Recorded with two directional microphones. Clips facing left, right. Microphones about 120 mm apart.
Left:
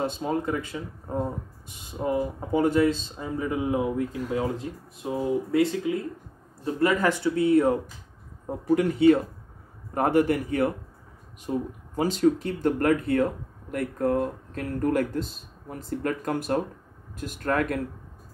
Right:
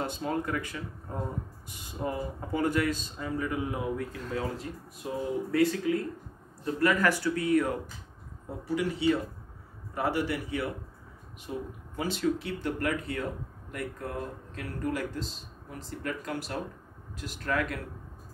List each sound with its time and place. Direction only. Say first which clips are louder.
0.0 s speech: left 4 dB; 20° left (ahead or behind)
4.2 s speech: left 6 dB; 10° left (ahead or behind)
4.6 s speech: left 4 dB; 25° left (ahead or behind)
8.5 s speech: left 7 dB; 50° left (ahead or behind)